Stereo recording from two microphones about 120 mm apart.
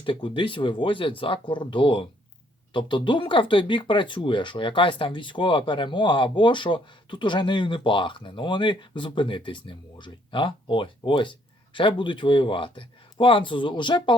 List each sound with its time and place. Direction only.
0.0 s speech: 45° left (ahead or behind)